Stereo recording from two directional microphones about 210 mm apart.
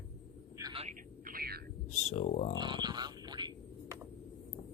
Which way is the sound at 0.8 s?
40° right (ahead or behind).